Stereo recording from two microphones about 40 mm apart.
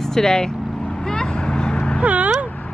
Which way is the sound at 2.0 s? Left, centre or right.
Right.